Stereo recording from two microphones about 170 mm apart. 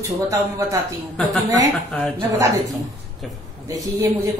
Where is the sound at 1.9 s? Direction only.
5° left (ahead or behind).